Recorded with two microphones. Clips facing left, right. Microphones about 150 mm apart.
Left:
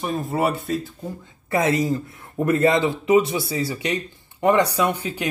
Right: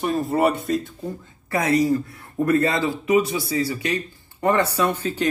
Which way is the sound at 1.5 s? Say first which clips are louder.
Right 1 dB; 25° left (ahead or behind).